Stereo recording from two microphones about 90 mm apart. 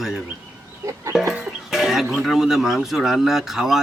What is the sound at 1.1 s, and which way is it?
Chicken, 5° right (ahead or behind).